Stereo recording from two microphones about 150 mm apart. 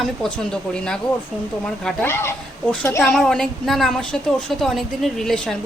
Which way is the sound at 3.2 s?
5° left (ahead or behind).